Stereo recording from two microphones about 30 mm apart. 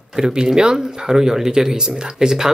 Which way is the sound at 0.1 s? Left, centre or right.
Right.